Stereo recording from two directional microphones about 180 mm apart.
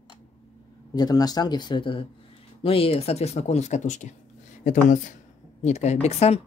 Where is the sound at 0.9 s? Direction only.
20° left (ahead or behind).